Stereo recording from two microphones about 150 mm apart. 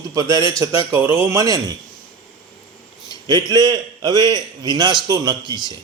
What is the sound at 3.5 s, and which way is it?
A man's voice, 25° right (ahead or behind).